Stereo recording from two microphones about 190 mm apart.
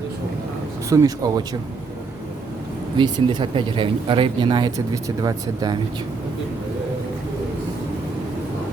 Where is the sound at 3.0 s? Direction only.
25° right (ahead or behind).